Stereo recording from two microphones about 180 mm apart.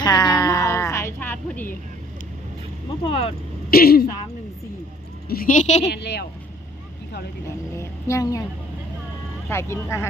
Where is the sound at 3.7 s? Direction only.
55° left (ahead or behind).